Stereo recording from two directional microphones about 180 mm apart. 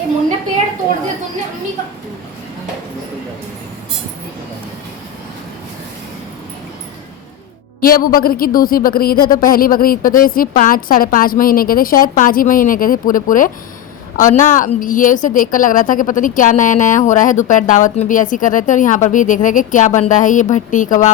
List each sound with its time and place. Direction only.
7.8 s speech: 55° left (ahead or behind)